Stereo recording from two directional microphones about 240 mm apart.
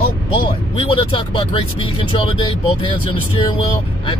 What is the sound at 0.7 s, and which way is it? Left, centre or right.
Speech, left.